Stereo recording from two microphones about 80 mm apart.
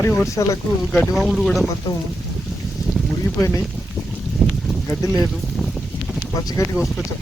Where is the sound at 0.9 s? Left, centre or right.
Centre.